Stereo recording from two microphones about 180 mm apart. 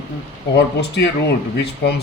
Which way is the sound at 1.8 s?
70° left (ahead or behind).